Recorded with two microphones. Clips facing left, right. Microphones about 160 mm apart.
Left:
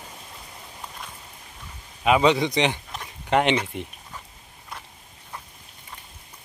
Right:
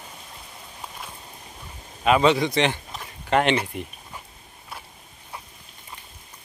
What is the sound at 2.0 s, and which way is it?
Speech, 15° left (ahead or behind).